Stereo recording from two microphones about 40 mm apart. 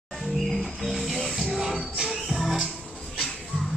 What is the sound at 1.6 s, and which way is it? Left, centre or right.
Music, centre.